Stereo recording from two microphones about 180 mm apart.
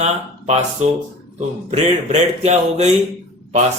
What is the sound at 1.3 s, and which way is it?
A man's voice, 40° right (ahead or behind).